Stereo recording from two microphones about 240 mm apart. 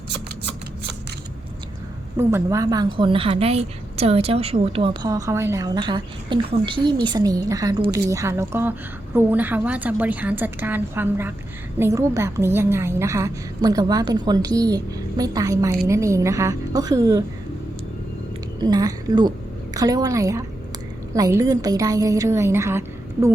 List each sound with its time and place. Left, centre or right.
2.1 s a woman's voice: centre
18.6 s a woman's voice: centre